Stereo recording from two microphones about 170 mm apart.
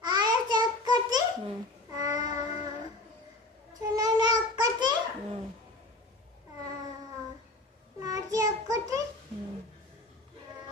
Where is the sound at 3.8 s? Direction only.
25° right (ahead or behind).